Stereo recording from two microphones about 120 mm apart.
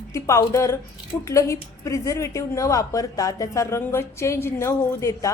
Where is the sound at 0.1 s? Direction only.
25° left (ahead or behind).